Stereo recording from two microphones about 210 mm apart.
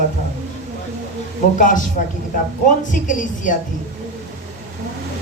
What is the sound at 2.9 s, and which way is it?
Speech, 40° left (ahead or behind).